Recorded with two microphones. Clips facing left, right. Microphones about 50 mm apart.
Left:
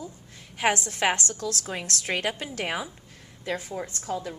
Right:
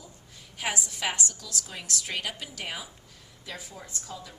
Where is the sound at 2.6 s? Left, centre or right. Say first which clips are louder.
Left 7 dB; left.